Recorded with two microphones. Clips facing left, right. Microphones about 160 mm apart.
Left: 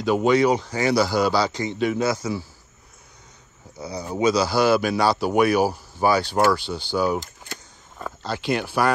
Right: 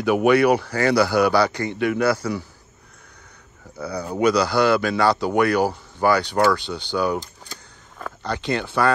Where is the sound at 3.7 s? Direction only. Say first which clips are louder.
Right 3 dB; 60° right (ahead or behind).